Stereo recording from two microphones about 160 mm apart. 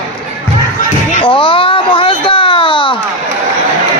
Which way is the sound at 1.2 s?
30° left (ahead or behind).